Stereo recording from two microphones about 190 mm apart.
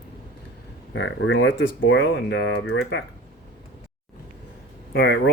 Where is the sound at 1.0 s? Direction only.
75° left (ahead or behind).